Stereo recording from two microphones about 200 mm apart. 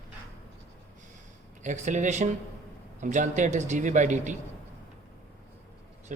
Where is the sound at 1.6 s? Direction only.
35° right (ahead or behind).